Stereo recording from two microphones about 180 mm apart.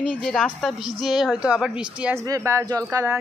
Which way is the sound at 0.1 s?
Centre (ahead or behind).